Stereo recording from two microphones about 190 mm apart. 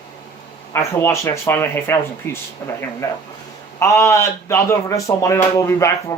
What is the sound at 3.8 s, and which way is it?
Speech, 15° left (ahead or behind).